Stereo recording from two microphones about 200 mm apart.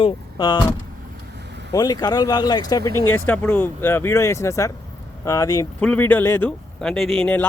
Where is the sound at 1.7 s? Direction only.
20° left (ahead or behind).